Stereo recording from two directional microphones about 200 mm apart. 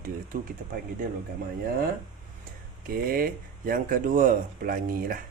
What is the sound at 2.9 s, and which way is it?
Speech, 45° right (ahead or behind).